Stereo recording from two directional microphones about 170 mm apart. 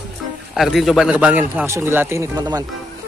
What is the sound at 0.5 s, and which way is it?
A man's voice, centre (ahead or behind).